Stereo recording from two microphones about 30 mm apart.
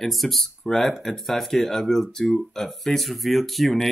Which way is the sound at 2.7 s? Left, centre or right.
Centre.